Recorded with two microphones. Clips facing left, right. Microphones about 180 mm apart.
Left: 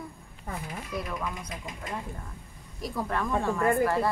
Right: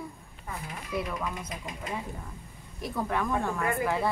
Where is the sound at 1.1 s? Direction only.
5° right (ahead or behind).